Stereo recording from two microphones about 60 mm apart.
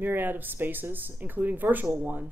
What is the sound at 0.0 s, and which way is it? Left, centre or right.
Speech, right.